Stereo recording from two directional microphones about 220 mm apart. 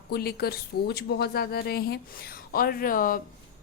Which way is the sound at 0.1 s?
45° left (ahead or behind).